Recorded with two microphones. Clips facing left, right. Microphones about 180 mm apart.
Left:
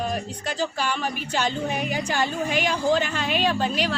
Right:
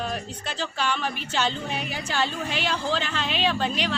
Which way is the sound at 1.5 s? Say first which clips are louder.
Left 4 dB; 50° left (ahead or behind).